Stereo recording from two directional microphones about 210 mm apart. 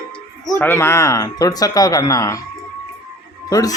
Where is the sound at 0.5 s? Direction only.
10° left (ahead or behind).